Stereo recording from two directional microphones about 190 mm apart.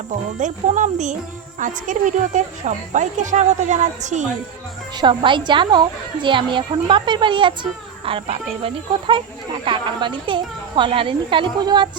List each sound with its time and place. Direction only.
0.1 s speech: 40° right (ahead or behind)
4.9 s speech: 25° right (ahead or behind)